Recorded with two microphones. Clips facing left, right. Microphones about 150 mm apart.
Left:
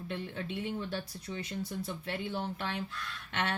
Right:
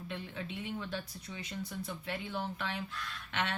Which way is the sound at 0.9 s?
40° left (ahead or behind).